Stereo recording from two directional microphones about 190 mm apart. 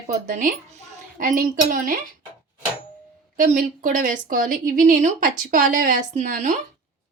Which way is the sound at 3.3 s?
45° right (ahead or behind).